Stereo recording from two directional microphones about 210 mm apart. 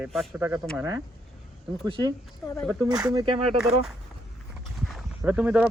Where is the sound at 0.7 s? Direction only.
15° right (ahead or behind).